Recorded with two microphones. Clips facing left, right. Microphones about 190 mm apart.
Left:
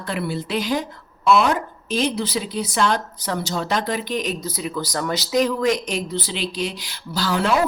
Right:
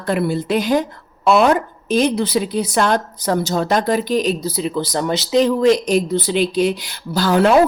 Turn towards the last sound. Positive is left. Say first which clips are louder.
# right 7 dB
turn(degrees=-55)  # may be behind; listen again after turning